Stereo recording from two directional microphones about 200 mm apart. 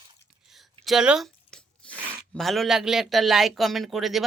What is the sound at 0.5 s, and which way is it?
Speech, centre (ahead or behind).